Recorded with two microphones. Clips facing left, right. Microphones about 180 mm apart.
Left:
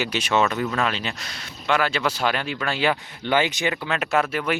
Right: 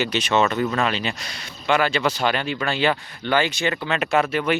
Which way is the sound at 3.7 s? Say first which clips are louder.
Right 2 dB; 5° left (ahead or behind).